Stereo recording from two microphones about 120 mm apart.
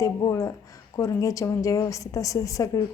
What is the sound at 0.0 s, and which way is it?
A woman's voice, 25° left (ahead or behind).